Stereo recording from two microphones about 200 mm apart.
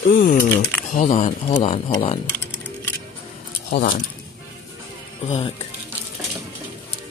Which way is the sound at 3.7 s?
45° left (ahead or behind).